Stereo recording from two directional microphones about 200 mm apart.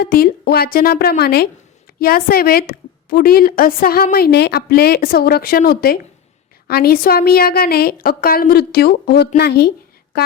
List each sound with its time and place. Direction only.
0.0 s a woman's voice: 50° left (ahead or behind)